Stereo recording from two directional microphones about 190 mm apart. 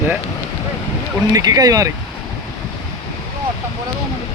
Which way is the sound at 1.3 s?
20° right (ahead or behind).